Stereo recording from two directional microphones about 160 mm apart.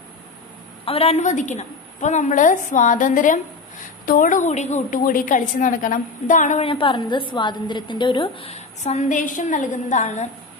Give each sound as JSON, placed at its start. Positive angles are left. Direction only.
{"t": 0.8, "sound": "a woman's voice", "side_deg": 40}
{"t": 6.6, "sound": "a woman's voice", "side_deg": 35}